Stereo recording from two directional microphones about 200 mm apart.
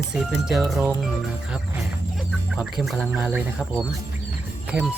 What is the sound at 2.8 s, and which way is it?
Speech, centre (ahead or behind).